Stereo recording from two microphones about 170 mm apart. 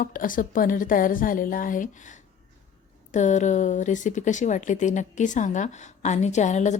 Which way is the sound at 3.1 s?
45° left (ahead or behind).